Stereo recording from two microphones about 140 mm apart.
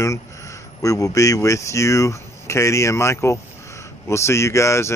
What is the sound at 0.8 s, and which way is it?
Speech, 25° left (ahead or behind).